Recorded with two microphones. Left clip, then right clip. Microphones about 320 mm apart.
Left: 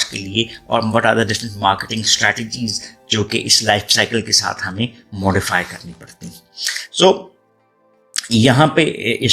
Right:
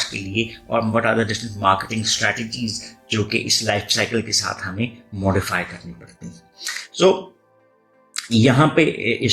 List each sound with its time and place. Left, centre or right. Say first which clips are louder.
0.0 s speech: left 4 dB; left